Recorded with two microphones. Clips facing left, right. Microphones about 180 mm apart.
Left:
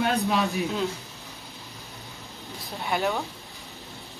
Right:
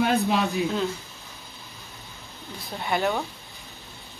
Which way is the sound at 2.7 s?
Centre (ahead or behind).